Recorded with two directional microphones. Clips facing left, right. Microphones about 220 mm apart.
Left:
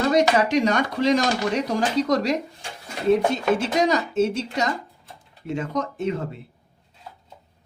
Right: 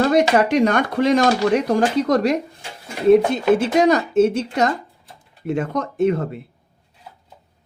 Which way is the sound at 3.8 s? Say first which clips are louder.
Right 6 dB; 55° right (ahead or behind).